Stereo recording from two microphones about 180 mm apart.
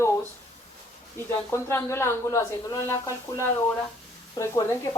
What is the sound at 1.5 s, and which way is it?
Speech, 15° left (ahead or behind).